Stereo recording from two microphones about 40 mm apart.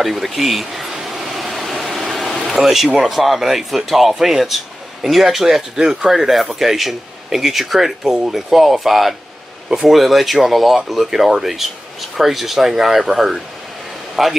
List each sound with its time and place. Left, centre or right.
0.0 s speech: centre
1.0 s a sound: centre
2.5 s speech: centre